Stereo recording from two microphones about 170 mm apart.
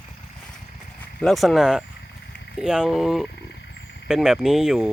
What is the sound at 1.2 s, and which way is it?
Speech, centre (ahead or behind).